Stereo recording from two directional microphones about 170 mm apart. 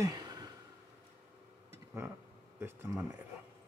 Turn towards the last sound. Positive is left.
turn(degrees=-15)  # may be behind; listen again after turning